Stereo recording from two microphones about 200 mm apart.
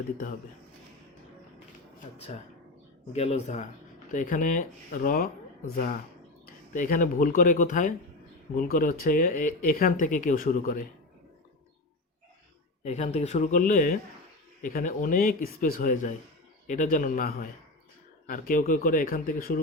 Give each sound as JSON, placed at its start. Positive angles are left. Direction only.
{"t": 3.1, "sound": "speech", "side_deg": 30}
{"t": 6.7, "sound": "speech", "side_deg": 40}
{"t": 12.8, "sound": "speech", "side_deg": 30}